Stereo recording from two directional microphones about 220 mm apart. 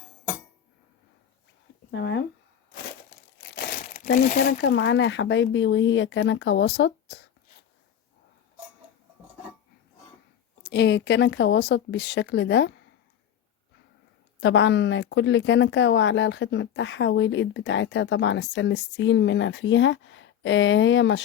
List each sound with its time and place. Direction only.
1.9 s a sound: 50° left (ahead or behind)
3.4 s speech: 50° left (ahead or behind)
10.6 s speech: 50° left (ahead or behind)
14.4 s speech: 55° left (ahead or behind)